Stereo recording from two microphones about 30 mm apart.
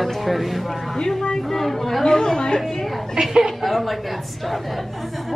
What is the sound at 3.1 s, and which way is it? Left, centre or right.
Speech, right.